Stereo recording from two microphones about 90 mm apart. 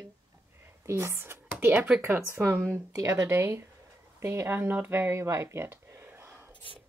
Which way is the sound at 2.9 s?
40° right (ahead or behind).